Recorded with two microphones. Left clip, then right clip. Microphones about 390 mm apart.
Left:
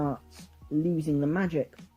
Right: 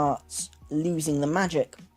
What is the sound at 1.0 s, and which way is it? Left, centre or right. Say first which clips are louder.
Speech: right 2 dB; centre.